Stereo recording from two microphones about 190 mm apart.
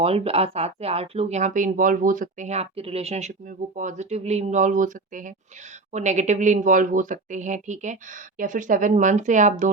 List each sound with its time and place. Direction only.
0.0 s speech: 30° right (ahead or behind)